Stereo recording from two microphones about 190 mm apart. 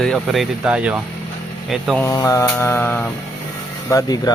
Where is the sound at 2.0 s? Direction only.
20° left (ahead or behind).